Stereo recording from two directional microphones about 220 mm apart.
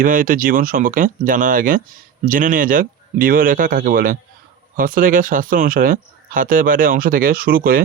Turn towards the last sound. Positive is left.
turn(degrees=-40)  # may be behind; listen again after turning